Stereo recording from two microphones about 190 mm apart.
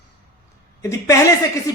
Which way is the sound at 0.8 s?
15° left (ahead or behind).